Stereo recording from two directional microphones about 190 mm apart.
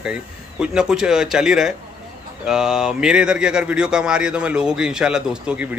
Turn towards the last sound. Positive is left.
turn(degrees=-5)  # may be behind; listen again after turning